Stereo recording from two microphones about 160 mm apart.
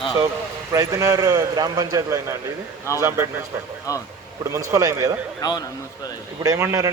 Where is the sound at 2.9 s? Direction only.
20° left (ahead or behind).